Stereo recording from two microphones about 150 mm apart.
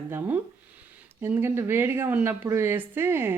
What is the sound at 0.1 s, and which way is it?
Speech, 15° right (ahead or behind).